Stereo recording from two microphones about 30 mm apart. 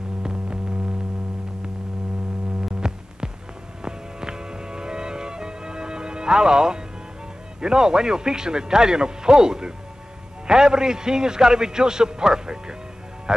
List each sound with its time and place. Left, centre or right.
0.2 s hum: right
2.8 s music: right
7.6 s a man's voice: right